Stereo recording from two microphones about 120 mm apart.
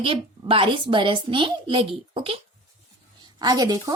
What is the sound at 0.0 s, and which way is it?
A woman's voice, 45° right (ahead or behind).